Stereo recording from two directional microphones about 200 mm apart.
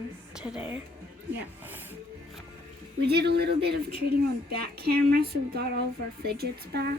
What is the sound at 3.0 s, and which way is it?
Speech, 55° right (ahead or behind).